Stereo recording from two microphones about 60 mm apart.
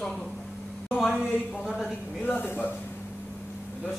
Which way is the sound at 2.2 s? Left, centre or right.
Left.